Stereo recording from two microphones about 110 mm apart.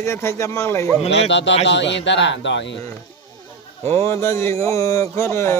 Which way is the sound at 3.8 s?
25° left (ahead or behind).